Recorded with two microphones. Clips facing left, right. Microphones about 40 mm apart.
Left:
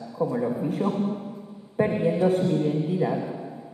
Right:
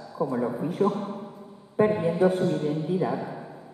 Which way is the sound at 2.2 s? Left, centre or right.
Centre.